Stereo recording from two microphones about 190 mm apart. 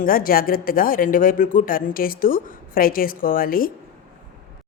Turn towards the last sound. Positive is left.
turn(degrees=50)  # may be behind; listen again after turning